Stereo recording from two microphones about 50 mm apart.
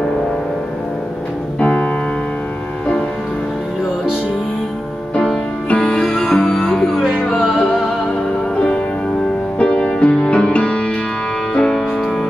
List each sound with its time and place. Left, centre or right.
1.6 s music: left
5.1 s music: centre
8.5 s music: left